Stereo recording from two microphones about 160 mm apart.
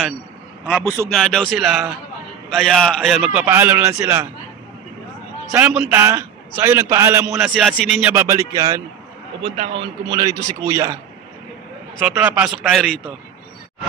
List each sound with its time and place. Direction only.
1.1 s a man's voice: 5° left (ahead or behind)
3.4 s a man's voice: 15° right (ahead or behind)
5.5 s a man's voice: 5° right (ahead or behind)
7.2 s a man's voice: 5° right (ahead or behind)
8.1 s a man's voice: 15° right (ahead or behind)
9.4 s a man's voice: 35° right (ahead or behind); by 11.0 s 15° right (ahead or behind)
12.2 s a man's voice: 10° right (ahead or behind)
12.6 s a man's voice: centre (ahead or behind)